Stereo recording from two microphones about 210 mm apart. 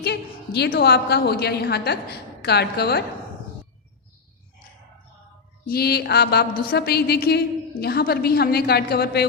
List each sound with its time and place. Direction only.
0.0 s a woman's voice: 50° left (ahead or behind)
5.6 s a woman's voice: 45° left (ahead or behind)